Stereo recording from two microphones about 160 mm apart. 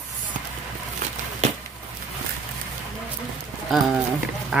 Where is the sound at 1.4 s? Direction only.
45° right (ahead or behind).